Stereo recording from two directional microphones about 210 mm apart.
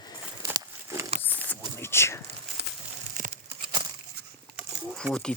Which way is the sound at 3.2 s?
40° right (ahead or behind).